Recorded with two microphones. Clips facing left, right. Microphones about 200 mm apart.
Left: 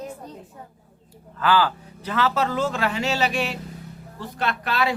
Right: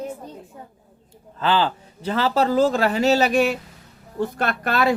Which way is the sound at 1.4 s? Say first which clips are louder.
Even; 25° right (ahead or behind).